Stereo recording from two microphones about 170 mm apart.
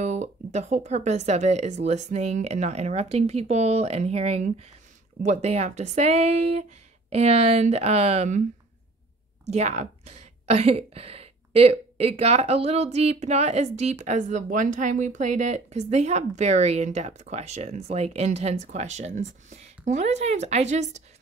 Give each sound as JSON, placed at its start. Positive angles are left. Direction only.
{"t": 0.0, "sound": "a woman's voice", "side_deg": -45}
{"t": 9.5, "sound": "a woman's voice", "side_deg": -40}